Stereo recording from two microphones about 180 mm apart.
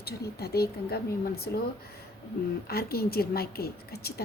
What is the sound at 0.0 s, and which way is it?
A woman's voice, 60° left (ahead or behind).